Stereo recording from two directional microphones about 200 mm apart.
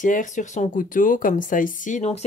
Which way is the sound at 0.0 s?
40° left (ahead or behind).